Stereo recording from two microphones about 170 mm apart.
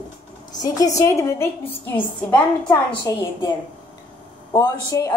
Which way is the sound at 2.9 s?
30° left (ahead or behind).